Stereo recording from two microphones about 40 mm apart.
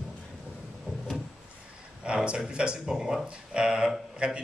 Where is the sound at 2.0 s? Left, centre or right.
Right.